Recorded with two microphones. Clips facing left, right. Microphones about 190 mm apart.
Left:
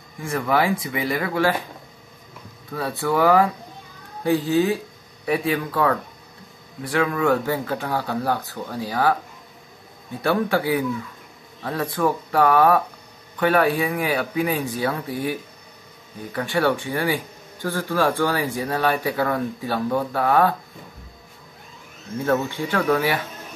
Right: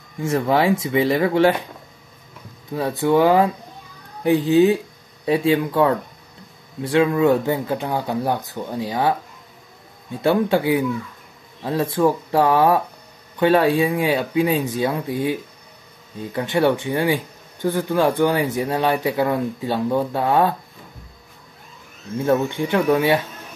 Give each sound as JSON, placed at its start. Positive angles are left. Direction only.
{"t": 0.2, "sound": "speech", "side_deg": -25}
{"t": 2.7, "sound": "speech", "side_deg": -20}
{"t": 10.2, "sound": "speech", "side_deg": -20}
{"t": 16.3, "sound": "speech", "side_deg": -20}
{"t": 22.2, "sound": "speech", "side_deg": -20}